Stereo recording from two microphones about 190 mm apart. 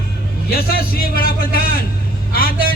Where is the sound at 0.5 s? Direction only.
50° left (ahead or behind).